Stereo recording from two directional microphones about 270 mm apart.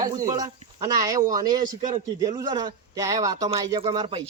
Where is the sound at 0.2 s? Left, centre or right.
Centre.